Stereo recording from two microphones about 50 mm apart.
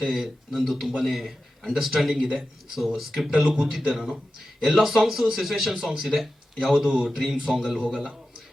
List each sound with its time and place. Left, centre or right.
0.2 s a man's voice: centre
5.7 s a man's voice: centre